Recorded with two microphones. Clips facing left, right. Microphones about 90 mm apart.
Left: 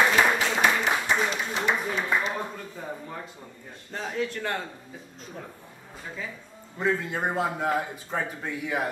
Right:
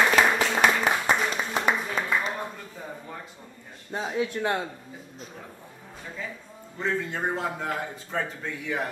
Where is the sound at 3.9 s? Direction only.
15° right (ahead or behind).